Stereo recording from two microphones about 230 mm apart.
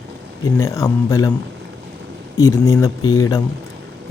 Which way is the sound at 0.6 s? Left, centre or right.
Centre.